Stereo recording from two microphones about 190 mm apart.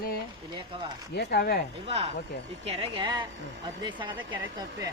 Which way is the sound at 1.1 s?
55° left (ahead or behind).